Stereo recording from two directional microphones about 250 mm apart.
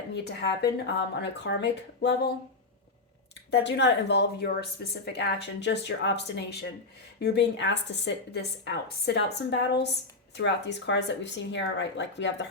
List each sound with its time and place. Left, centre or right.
0.3 s a woman's voice: left
3.5 s a woman's voice: left